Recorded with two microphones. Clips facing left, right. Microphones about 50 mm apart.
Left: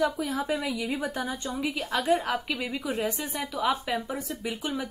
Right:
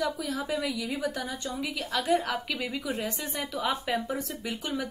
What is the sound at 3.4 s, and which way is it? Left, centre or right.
Speech, centre.